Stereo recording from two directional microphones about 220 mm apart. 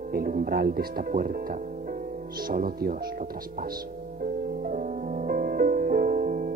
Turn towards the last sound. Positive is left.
turn(degrees=-40)  # may be behind; listen again after turning